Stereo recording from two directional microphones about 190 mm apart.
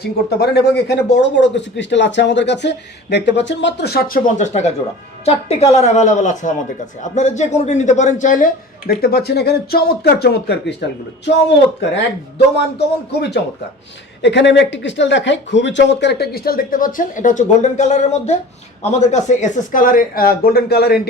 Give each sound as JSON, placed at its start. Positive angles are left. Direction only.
{"t": 0.0, "sound": "speech", "side_deg": 55}
{"t": 4.4, "sound": "a woman's voice", "side_deg": 35}
{"t": 13.1, "sound": "a man's voice", "side_deg": 60}